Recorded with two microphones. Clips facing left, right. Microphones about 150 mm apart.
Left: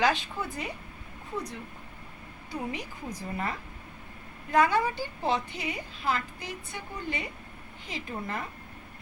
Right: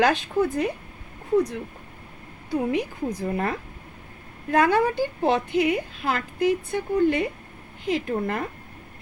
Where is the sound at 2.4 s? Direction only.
60° right (ahead or behind).